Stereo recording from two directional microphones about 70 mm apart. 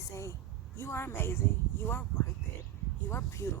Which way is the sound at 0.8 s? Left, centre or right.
Left.